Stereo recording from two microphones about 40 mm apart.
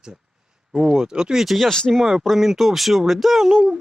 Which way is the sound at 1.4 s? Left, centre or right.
Centre.